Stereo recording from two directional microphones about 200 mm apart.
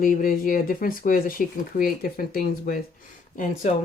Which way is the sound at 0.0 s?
45° left (ahead or behind).